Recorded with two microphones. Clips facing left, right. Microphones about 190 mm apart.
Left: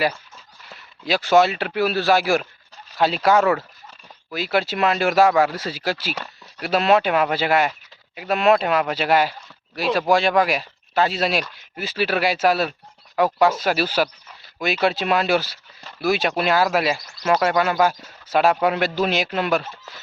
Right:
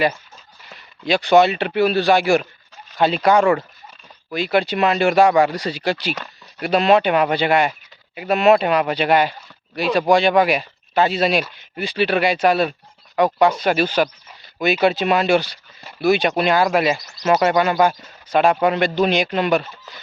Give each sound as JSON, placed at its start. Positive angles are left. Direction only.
{"t": 1.0, "sound": "speech", "side_deg": 0}